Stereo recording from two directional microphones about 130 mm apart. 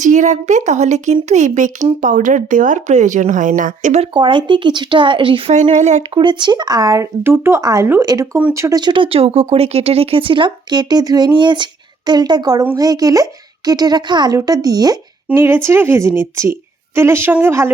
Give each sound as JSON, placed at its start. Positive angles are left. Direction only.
{"t": 0.0, "sound": "speech", "side_deg": -70}
{"t": 4.0, "sound": "speech", "side_deg": -40}
{"t": 5.7, "sound": "speech", "side_deg": -65}
{"t": 6.1, "sound": "a woman's voice", "side_deg": -35}
{"t": 8.8, "sound": "a woman's voice", "side_deg": -40}
{"t": 15.4, "sound": "a woman's voice", "side_deg": -20}